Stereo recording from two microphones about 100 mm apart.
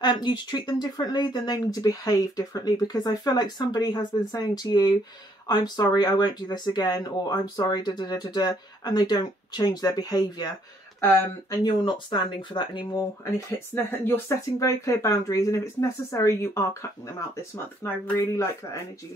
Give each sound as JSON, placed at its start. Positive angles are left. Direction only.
{"t": 0.0, "sound": "speech", "side_deg": 45}
{"t": 11.5, "sound": "speech", "side_deg": 50}
{"t": 13.8, "sound": "speech", "side_deg": 25}
{"t": 18.1, "sound": "speech", "side_deg": 30}